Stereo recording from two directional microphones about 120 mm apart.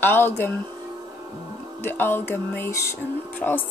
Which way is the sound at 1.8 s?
20° left (ahead or behind).